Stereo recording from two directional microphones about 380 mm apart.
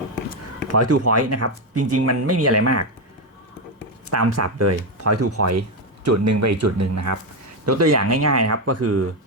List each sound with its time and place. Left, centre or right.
0.7 s speech: right
4.1 s speech: right